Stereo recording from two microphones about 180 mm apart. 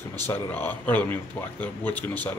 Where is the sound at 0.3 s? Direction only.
10° left (ahead or behind).